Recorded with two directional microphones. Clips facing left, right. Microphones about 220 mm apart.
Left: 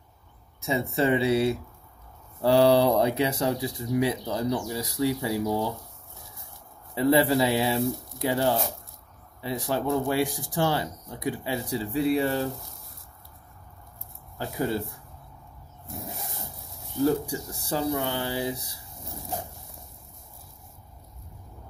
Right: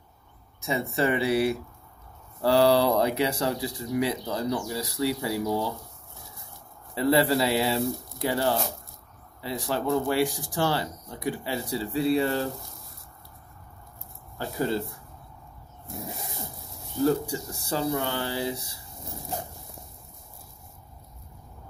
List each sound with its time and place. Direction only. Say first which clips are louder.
0.7 s speech: left 2 dB; 20° left (ahead or behind)
7.0 s speech: left 1 dB; 15° left (ahead or behind)
14.4 s speech: even; 10° left (ahead or behind)
17.3 s speech: even; 15° left (ahead or behind)